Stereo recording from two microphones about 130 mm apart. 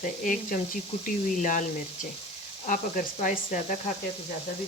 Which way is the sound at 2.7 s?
90° left.